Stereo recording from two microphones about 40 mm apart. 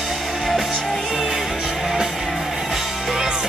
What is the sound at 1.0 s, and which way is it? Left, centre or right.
Music, centre.